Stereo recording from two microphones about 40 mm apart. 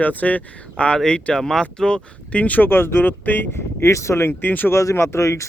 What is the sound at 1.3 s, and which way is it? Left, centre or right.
Speech, centre.